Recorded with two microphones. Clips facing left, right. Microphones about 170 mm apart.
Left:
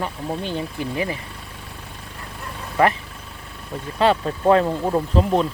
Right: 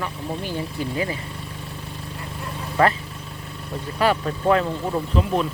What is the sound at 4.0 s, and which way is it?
Speech, 25° left (ahead or behind).